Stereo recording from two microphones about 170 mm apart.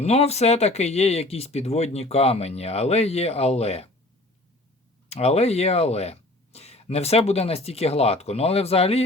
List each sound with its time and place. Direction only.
0.0 s speech: 40° left (ahead or behind)
5.0 s speech: 40° left (ahead or behind)